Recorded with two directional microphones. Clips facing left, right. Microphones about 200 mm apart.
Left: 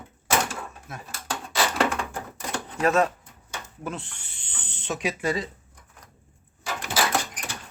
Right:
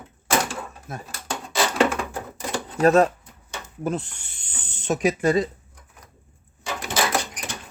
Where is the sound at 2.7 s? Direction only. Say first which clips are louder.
Right 5 dB; 35° right (ahead or behind).